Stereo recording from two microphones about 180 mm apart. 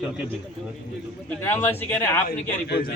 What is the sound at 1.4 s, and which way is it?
Speech, 15° left (ahead or behind).